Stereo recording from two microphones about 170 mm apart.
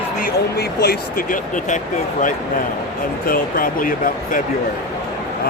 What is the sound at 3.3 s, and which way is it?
Speech, 55° left (ahead or behind).